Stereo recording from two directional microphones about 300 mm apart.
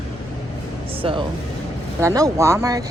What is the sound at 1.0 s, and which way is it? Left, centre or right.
Speech, centre.